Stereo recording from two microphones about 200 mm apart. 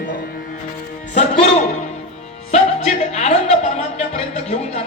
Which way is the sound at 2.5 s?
30° left (ahead or behind).